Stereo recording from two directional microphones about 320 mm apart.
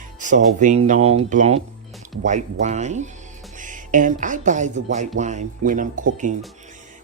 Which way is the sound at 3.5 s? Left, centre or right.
Right.